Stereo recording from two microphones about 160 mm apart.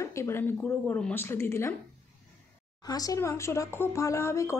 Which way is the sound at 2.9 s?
25° left (ahead or behind).